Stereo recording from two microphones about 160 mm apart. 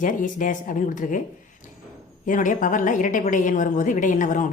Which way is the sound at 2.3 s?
55° left (ahead or behind).